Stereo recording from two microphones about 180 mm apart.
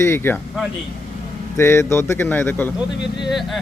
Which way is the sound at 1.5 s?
15° left (ahead or behind).